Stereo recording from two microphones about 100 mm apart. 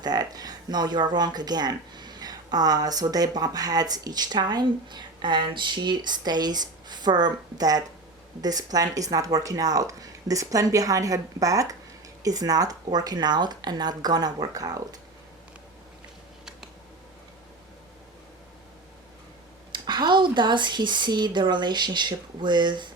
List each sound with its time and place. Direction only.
0.0 s speech: 40° right (ahead or behind)
19.7 s speech: 50° right (ahead or behind)